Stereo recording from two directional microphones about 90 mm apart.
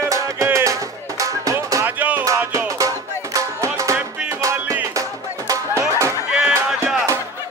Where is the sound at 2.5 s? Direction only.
35° right (ahead or behind).